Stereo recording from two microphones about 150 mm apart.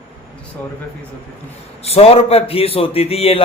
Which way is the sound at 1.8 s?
40° left (ahead or behind).